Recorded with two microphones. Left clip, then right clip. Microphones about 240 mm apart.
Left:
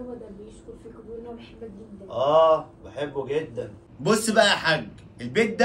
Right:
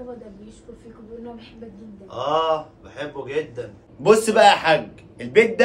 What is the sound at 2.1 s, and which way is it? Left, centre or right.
Speech, right.